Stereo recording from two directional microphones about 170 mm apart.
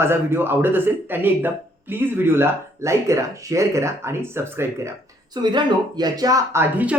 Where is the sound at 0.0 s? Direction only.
15° right (ahead or behind).